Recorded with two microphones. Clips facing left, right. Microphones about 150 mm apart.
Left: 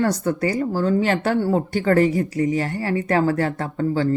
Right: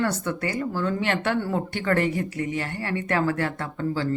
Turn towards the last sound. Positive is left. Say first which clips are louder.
# left 5 dB
turn(degrees=45)  # may be behind; listen again after turning